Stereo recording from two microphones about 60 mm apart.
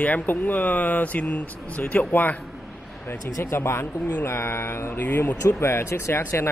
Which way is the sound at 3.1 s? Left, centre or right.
Left.